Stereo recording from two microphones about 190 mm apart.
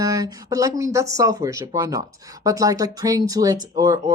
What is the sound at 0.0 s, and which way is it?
Speech, 20° right (ahead or behind).